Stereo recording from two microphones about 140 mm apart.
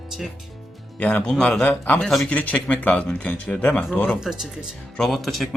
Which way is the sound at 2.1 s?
Centre (ahead or behind).